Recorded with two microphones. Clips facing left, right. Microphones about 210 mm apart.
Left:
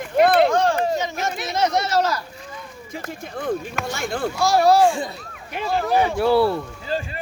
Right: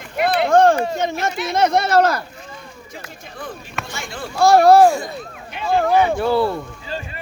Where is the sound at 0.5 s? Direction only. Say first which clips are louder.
Right 5 dB; 50° right (ahead or behind).